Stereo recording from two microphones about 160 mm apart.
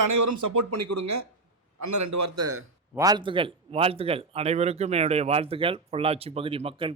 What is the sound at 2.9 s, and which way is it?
A man's voice, 25° right (ahead or behind).